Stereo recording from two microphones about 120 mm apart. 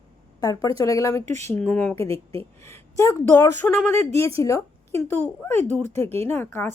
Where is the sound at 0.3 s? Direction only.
30° left (ahead or behind).